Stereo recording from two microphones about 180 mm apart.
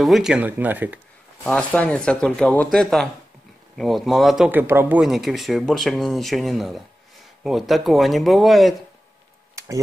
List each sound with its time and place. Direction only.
0.0 s speech: centre (ahead or behind)
1.4 s speech: 10° left (ahead or behind)
9.6 s a sound: 15° right (ahead or behind)